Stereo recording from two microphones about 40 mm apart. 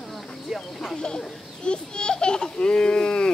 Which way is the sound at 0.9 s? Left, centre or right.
Centre.